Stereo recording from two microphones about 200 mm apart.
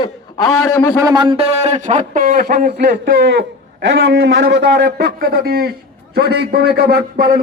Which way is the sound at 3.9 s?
60° right (ahead or behind).